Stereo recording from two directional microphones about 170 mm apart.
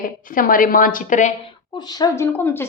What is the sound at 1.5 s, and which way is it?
A woman's voice, 25° left (ahead or behind).